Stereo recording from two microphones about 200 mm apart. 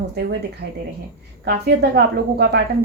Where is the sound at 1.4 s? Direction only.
55° right (ahead or behind).